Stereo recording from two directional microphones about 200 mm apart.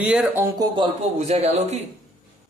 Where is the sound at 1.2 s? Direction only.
30° right (ahead or behind).